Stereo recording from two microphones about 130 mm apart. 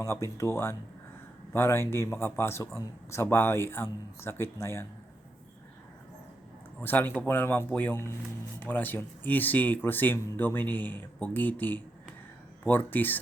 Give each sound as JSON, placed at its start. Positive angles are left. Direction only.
{"t": 0.0, "sound": "a man's voice", "side_deg": 20}
{"t": 6.8, "sound": "speech", "side_deg": 15}